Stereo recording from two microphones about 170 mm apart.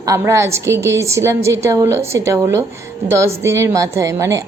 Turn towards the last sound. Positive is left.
turn(degrees=-15)  # may be behind; listen again after turning